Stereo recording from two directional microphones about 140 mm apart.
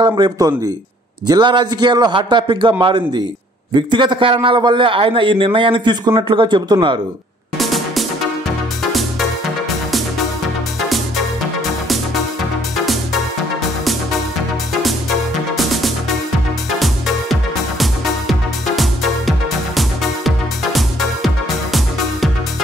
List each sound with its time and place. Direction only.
0.0 s a man's voice: 30° right (ahead or behind)
7.5 s music: centre (ahead or behind)
12.7 s music: centre (ahead or behind)
14.7 s music: centre (ahead or behind)